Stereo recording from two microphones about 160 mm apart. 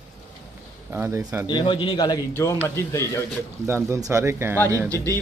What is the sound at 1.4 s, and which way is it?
A man's voice, 30° left (ahead or behind).